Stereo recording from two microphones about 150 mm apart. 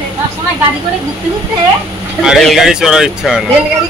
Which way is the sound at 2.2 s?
Centre (ahead or behind).